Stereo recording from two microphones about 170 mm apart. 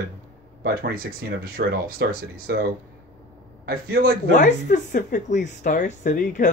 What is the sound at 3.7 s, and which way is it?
Speech, 60° right (ahead or behind).